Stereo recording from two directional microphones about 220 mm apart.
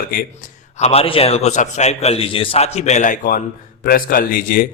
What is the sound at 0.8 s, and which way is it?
A man's voice, 30° left (ahead or behind).